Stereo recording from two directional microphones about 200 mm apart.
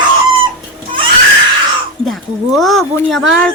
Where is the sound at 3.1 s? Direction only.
5° left (ahead or behind).